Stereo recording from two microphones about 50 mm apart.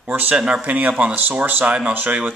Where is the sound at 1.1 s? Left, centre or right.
Right.